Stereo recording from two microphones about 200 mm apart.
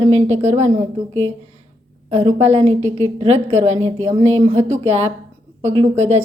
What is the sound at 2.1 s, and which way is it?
A woman's voice, 30° right (ahead or behind).